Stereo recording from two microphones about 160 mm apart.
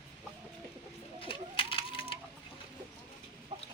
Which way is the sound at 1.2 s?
35° left (ahead or behind).